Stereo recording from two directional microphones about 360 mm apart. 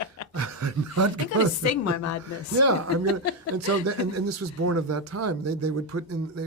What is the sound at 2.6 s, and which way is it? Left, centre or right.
A man's voice, right.